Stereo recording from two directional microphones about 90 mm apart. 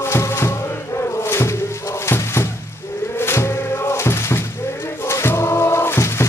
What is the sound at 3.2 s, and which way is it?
Music, 30° left (ahead or behind).